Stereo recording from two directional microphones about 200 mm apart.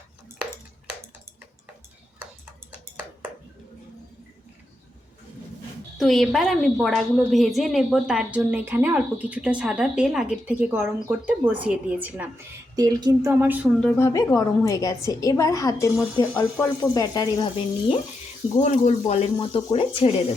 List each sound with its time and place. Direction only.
6.0 s a woman's voice: centre (ahead or behind)
13.8 s a woman's voice: 15° left (ahead or behind)
18.6 s speech: 35° left (ahead or behind)